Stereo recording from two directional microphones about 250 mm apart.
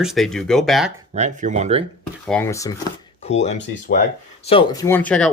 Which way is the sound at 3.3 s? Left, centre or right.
Left.